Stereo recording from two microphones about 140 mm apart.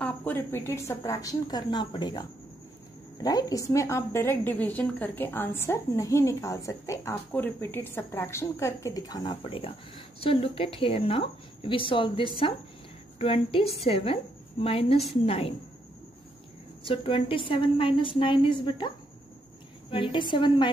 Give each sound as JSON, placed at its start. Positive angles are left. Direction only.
{"t": 0.0, "sound": "a woman's voice", "side_deg": 15}
{"t": 16.8, "sound": "a woman's voice", "side_deg": 40}